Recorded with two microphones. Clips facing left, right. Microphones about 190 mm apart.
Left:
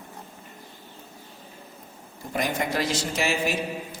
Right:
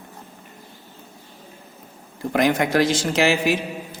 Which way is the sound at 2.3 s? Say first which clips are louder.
Right 8 dB; 80° right.